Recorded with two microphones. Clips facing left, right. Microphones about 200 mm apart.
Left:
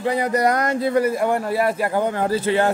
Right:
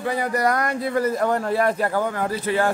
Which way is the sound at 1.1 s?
10° left (ahead or behind).